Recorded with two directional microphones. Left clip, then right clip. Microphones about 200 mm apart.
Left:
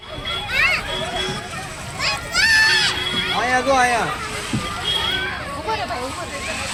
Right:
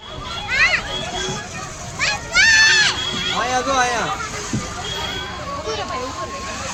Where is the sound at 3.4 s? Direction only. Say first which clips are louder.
Left 3 dB; 40° left (ahead or behind).